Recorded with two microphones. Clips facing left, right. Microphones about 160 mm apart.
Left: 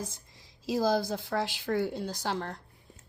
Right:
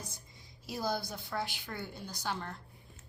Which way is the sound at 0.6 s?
90° left.